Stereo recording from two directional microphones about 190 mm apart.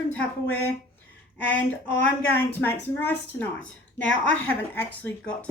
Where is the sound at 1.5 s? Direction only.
80° left.